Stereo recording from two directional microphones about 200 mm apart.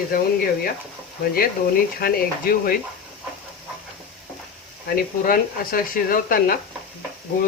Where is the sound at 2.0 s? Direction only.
50° left (ahead or behind).